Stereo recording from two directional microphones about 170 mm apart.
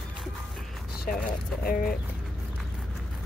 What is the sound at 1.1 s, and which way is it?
Speech, 55° left (ahead or behind).